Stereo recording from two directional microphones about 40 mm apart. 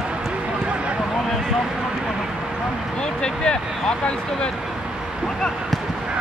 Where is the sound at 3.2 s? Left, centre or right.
Left.